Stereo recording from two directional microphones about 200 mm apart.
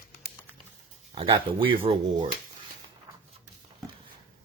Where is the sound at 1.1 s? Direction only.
25° right (ahead or behind).